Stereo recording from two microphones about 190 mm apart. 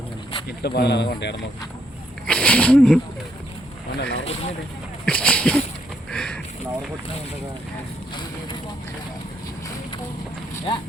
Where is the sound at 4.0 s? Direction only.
70° left (ahead or behind).